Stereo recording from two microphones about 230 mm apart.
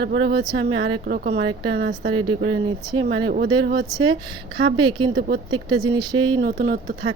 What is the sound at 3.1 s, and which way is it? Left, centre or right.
Speech, right.